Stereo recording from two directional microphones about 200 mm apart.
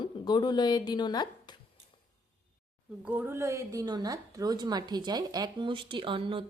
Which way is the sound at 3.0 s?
10° right (ahead or behind).